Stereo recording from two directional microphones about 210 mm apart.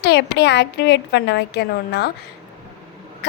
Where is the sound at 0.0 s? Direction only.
50° left (ahead or behind).